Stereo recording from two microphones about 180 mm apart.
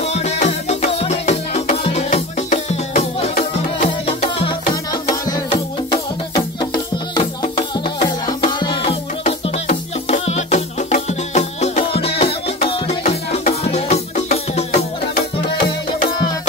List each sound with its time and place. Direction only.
0.0 s music: 35° left (ahead or behind)
5.1 s music: 20° left (ahead or behind); by 14.9 s 35° left (ahead or behind)